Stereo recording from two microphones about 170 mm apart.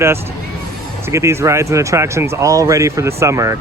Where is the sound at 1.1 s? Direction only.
15° right (ahead or behind).